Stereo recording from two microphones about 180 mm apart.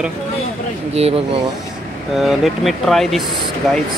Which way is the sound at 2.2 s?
Centre (ahead or behind).